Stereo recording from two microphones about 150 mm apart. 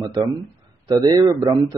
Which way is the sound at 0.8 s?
25° right (ahead or behind).